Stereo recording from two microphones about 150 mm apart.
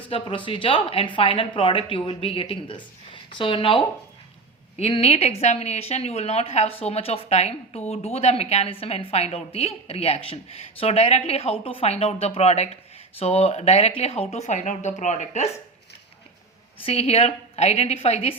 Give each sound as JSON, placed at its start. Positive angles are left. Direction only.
{"t": 0.1, "sound": "a woman's voice", "side_deg": 35}
{"t": 16.8, "sound": "a woman's voice", "side_deg": 40}